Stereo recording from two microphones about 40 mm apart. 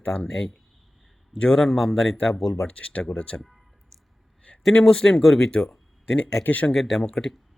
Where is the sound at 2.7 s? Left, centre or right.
Left.